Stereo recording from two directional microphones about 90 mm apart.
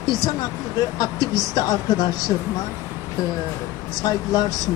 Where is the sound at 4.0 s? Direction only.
45° left (ahead or behind).